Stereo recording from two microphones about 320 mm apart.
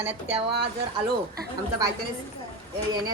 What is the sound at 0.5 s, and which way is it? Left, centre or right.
Speech, right.